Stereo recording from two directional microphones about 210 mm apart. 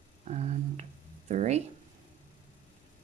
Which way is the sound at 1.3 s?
35° right (ahead or behind).